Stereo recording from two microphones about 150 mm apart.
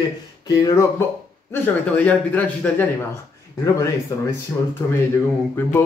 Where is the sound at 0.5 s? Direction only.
20° left (ahead or behind).